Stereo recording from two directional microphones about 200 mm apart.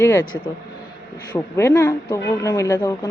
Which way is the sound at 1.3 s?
15° left (ahead or behind).